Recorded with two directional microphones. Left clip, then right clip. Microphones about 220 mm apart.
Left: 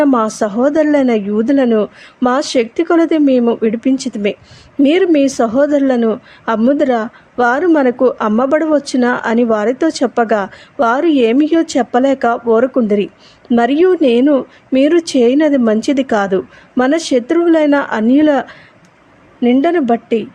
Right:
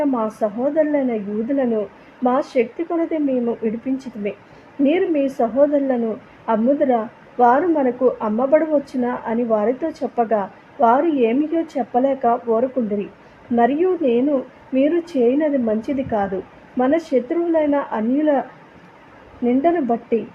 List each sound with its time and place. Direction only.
0.0 s a woman's voice: 25° left (ahead or behind)
19.5 s a woman's voice: 25° left (ahead or behind)